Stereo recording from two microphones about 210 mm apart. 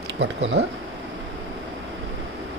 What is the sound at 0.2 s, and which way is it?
Speech, 60° right (ahead or behind).